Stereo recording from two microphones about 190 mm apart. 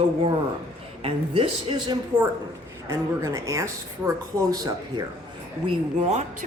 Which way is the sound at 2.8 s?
15° right (ahead or behind).